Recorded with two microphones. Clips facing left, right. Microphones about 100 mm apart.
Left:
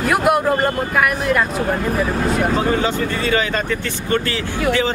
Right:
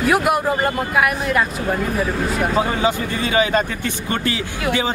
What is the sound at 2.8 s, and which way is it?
Speech, 15° right (ahead or behind).